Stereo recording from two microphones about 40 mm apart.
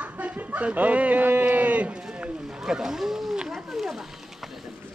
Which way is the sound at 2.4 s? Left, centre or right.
Centre.